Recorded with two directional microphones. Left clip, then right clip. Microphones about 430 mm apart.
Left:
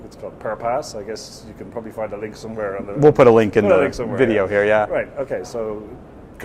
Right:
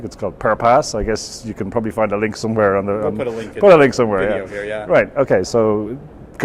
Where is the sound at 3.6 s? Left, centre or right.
Right.